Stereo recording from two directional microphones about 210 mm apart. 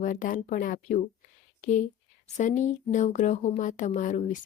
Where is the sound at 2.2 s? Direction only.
35° left (ahead or behind).